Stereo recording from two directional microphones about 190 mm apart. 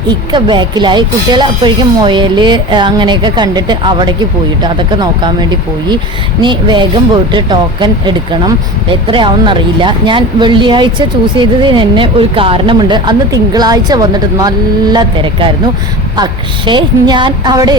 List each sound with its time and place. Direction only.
0.3 s a woman's voice: 25° right (ahead or behind)